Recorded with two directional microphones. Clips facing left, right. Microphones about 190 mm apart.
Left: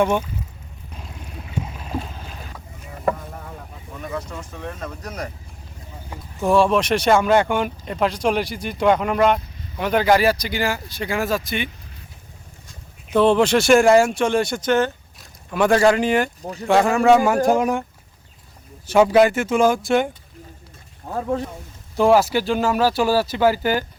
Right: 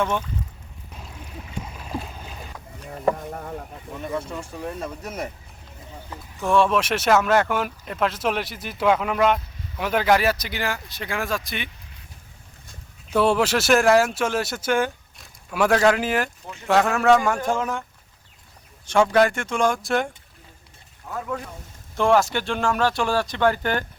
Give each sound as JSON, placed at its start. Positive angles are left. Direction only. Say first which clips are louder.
{"t": 0.0, "sound": "speech", "louder": "left 5 dB", "side_deg": 10}
{"t": 4.3, "sound": "speech", "louder": "right 1 dB", "side_deg": -10}
{"t": 6.5, "sound": "speech", "louder": "left 3 dB", "side_deg": 0}
{"t": 13.1, "sound": "speech", "louder": "left 4 dB", "side_deg": -5}
{"t": 16.4, "sound": "speech", "louder": "left 9 dB", "side_deg": 35}
{"t": 16.6, "sound": "speech", "louder": "left 3 dB", "side_deg": 0}
{"t": 18.9, "sound": "speech", "louder": "left 4 dB", "side_deg": 5}
{"t": 21.1, "sound": "speech", "louder": "left 6 dB", "side_deg": 30}
{"t": 21.9, "sound": "speech", "louder": "left 4 dB", "side_deg": 0}